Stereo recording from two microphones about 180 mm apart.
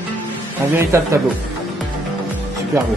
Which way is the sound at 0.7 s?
15° right (ahead or behind).